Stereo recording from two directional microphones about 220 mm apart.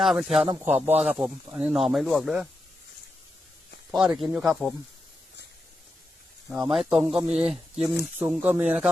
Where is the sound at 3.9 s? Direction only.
Centre (ahead or behind).